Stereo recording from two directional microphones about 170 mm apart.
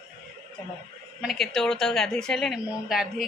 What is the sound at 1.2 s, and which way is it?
A woman's voice, centre (ahead or behind).